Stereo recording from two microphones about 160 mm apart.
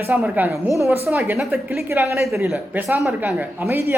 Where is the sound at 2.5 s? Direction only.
15° right (ahead or behind).